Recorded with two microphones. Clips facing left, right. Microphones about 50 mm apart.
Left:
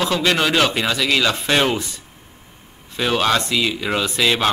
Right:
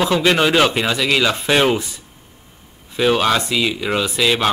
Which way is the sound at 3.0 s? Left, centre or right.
Centre.